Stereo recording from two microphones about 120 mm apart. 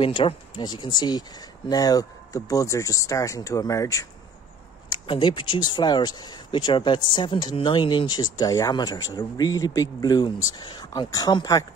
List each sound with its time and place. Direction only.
0.0 s speech: 50° left (ahead or behind); by 4.1 s 30° left (ahead or behind)
4.8 s speech: 40° left (ahead or behind)